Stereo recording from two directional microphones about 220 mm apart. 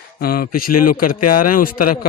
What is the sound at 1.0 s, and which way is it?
Speech, 90° left.